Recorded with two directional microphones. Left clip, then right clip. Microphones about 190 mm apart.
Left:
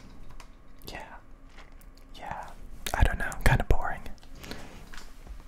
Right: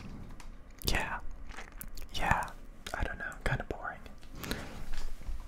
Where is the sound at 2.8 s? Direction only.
20° left (ahead or behind).